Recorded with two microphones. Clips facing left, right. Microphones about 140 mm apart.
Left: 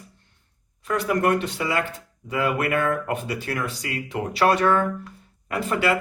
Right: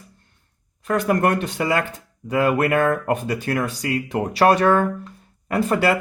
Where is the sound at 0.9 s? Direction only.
50° right (ahead or behind).